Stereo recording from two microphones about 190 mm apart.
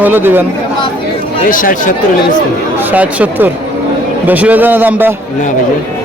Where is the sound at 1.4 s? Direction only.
45° left (ahead or behind).